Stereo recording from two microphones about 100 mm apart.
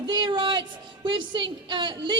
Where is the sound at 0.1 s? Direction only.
50° right (ahead or behind).